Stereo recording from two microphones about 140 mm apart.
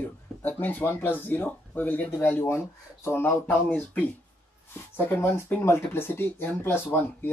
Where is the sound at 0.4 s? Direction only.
10° left (ahead or behind).